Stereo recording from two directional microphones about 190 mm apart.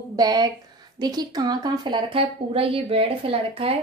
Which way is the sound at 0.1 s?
20° right (ahead or behind).